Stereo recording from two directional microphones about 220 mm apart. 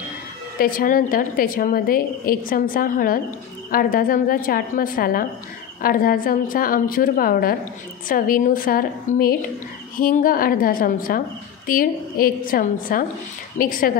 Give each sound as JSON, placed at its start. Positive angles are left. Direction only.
{"t": 0.6, "sound": "a woman's voice", "side_deg": 40}